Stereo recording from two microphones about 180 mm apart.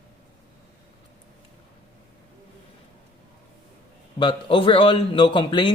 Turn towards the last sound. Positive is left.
turn(degrees=25)  # may be behind; listen again after turning